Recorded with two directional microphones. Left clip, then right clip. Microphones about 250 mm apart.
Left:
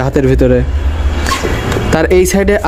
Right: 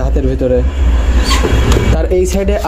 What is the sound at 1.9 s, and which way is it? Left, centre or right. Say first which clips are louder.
Speech: left 8 dB; left.